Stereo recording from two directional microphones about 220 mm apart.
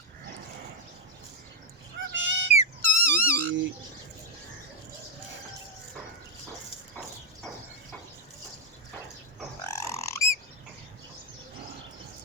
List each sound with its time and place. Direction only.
2.1 s bird: 55° right (ahead or behind)
2.5 s dog: 30° left (ahead or behind)
3.0 s dog: 10° left (ahead or behind)
3.3 s bird: 60° right (ahead or behind)
9.6 s a sound: 10° left (ahead or behind)